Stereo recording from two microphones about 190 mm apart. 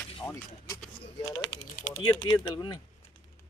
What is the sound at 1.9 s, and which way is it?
Speech, 25° left (ahead or behind).